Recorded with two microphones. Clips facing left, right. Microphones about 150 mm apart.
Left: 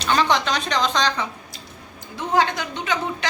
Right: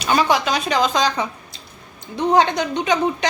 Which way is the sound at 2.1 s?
20° right (ahead or behind).